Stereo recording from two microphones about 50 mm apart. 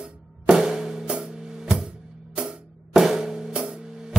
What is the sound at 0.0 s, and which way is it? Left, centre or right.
Music, centre.